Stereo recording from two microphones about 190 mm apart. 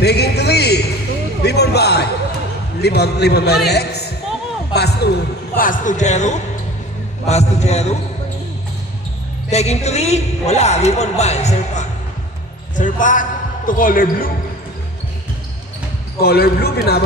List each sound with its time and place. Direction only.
0.0 s a man's voice: 60° left (ahead or behind)
5.6 s a man's voice: 45° left (ahead or behind)
9.5 s a man's voice: 35° left (ahead or behind)
16.2 s a man's voice: 55° left (ahead or behind)